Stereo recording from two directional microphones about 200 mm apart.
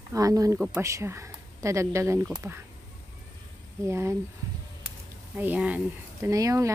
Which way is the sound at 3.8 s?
15° right (ahead or behind).